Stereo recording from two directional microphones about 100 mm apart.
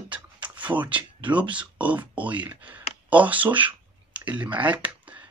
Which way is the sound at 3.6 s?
15° right (ahead or behind).